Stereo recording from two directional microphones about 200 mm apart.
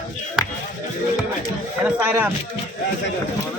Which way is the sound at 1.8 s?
10° right (ahead or behind).